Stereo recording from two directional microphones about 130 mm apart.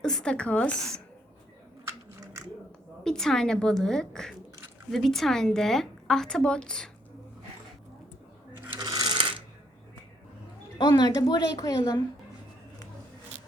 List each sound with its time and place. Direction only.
0.0 s a woman's voice: 5° left (ahead or behind)
3.0 s a woman's voice: 5° left (ahead or behind)
8.7 s coin: 30° right (ahead or behind)
10.8 s a woman's voice: 35° left (ahead or behind)